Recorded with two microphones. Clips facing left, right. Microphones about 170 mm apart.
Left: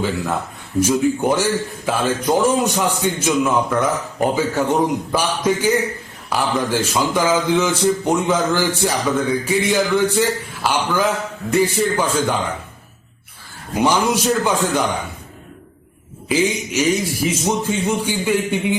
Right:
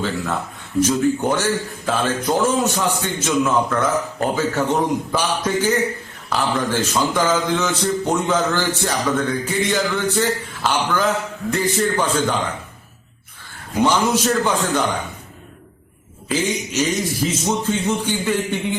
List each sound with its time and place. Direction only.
0.8 s a man's voice: 10° left (ahead or behind)
13.7 s a man's voice: 10° left (ahead or behind)
16.3 s a man's voice: 10° left (ahead or behind)